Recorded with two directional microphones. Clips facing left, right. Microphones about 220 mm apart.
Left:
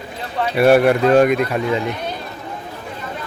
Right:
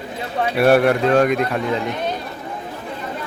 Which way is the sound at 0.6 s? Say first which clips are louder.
Left 2 dB; centre (ahead or behind).